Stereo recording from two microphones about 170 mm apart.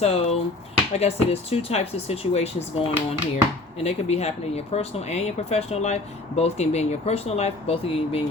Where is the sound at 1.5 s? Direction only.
40° left (ahead or behind).